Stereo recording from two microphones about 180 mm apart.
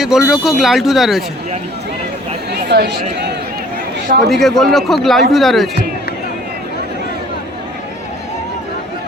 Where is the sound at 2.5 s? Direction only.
65° right (ahead or behind).